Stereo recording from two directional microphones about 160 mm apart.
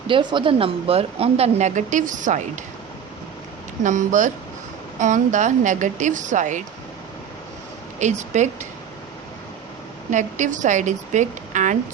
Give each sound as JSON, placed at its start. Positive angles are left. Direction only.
{"t": 0.1, "sound": "speech", "side_deg": -30}
{"t": 3.8, "sound": "a woman's voice", "side_deg": -50}
{"t": 8.2, "sound": "a woman's voice", "side_deg": -45}
{"t": 10.1, "sound": "a woman's voice", "side_deg": -50}